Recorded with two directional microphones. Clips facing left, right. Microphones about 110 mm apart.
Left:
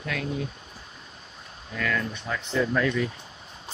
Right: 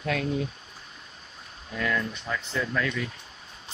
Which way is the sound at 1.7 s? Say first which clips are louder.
Even; 10° right (ahead or behind).